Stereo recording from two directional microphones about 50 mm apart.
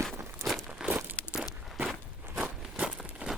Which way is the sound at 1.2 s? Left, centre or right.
Left.